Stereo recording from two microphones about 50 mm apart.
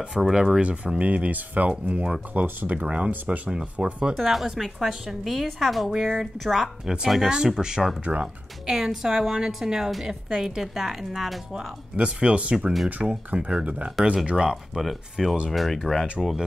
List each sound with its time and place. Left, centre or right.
0.2 s a woman's voice: centre
0.6 s speech: right
2.3 s speech: right; by 4.1 s centre
4.1 s a woman's voice: centre
7.2 s speech: centre
8.0 s speech: right
8.6 s a woman's voice: centre
11.5 s speech: centre
14.5 s a woman's voice: centre